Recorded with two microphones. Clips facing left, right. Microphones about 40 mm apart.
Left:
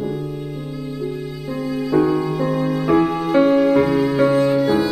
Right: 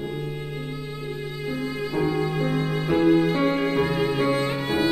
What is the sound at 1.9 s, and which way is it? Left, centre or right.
Music, left.